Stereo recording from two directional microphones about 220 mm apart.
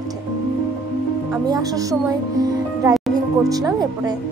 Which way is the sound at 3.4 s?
15° right (ahead or behind).